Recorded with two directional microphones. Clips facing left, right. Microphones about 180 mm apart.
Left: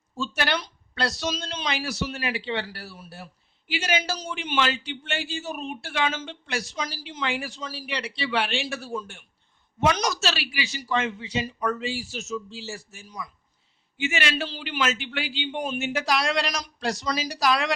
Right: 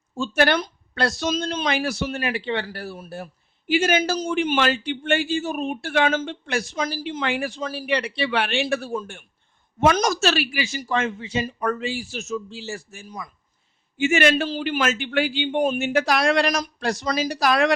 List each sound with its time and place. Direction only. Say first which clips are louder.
0.2 s a man's voice: right 7 dB; 50° right (ahead or behind)